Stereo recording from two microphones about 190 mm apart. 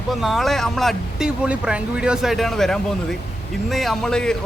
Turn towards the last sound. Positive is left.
turn(degrees=5)  # may be behind; listen again after turning